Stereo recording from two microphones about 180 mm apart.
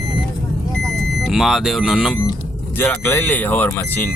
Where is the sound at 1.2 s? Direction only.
Centre (ahead or behind).